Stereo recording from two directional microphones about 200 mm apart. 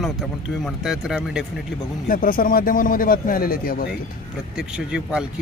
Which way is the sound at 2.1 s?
45° left (ahead or behind).